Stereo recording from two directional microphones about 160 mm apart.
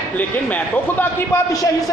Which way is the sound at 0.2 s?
10° left (ahead or behind).